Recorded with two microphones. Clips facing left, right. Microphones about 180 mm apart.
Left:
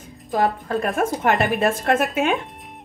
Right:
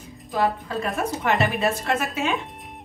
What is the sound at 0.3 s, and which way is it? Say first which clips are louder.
A woman's voice: left 3 dB; 50° left (ahead or behind).